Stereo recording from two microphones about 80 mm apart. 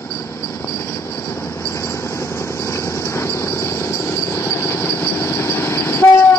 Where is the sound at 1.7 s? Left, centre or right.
Left.